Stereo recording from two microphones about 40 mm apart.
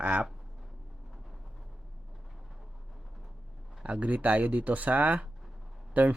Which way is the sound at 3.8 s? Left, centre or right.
Right.